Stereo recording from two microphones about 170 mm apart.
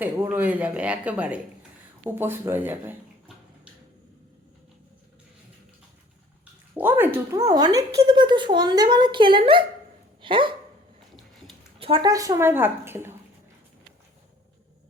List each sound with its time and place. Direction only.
0.0 s speech: 10° right (ahead or behind)
6.7 s speech: 10° right (ahead or behind); by 10.5 s 30° right (ahead or behind)
11.8 s a woman's voice: 30° right (ahead or behind)
12.1 s speech: 20° right (ahead or behind)